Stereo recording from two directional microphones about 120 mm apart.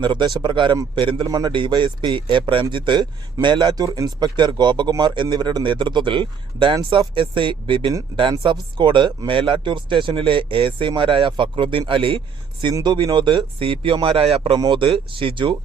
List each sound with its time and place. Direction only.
0.0 s speech: 40° right (ahead or behind)